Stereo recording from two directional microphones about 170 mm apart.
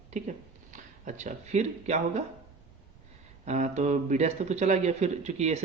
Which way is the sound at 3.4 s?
45° right (ahead or behind).